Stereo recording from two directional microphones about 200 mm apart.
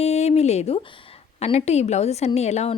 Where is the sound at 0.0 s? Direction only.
35° left (ahead or behind).